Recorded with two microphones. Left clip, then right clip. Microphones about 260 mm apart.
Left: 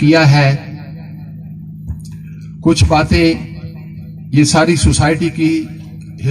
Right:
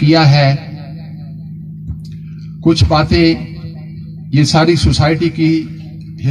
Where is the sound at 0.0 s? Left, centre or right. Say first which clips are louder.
Even; left.